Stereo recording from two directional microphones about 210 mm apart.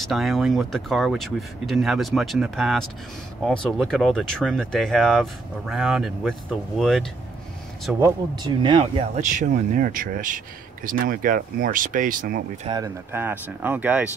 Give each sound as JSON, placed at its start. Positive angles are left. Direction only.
{"t": 0.0, "sound": "speech", "side_deg": 0}
{"t": 8.0, "sound": "speech", "side_deg": -20}
{"t": 12.6, "sound": "speech", "side_deg": -15}